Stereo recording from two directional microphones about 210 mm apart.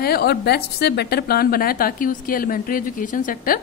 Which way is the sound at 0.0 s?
50° left (ahead or behind).